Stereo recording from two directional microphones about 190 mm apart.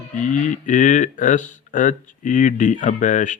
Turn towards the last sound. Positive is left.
turn(degrees=40)  # may be behind; listen again after turning